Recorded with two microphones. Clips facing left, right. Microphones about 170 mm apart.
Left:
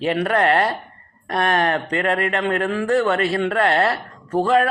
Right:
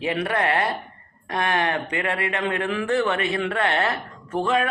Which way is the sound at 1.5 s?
40° left (ahead or behind).